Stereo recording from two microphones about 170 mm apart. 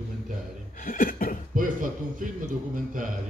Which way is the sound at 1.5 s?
50° right (ahead or behind).